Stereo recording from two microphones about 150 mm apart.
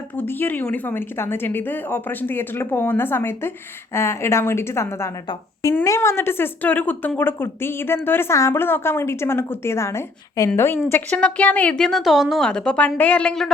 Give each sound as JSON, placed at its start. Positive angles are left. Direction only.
{"t": 0.2, "sound": "a woman's voice", "side_deg": 15}